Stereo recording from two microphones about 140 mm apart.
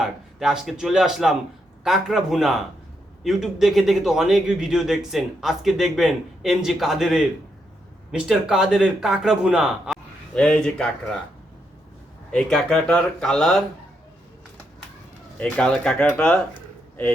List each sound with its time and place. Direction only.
0.0 s a man's voice: 5° right (ahead or behind)
12.3 s a man's voice: 5° left (ahead or behind)
15.4 s speech: 10° left (ahead or behind)